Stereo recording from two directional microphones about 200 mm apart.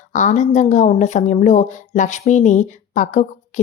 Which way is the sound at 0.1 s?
40° left (ahead or behind).